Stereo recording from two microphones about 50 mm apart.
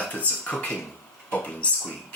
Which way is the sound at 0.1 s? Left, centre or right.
Left.